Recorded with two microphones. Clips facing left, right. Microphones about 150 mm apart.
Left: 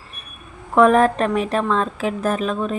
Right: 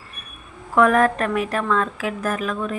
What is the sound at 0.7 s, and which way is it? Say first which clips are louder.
A woman's voice: left 3 dB; 25° left (ahead or behind).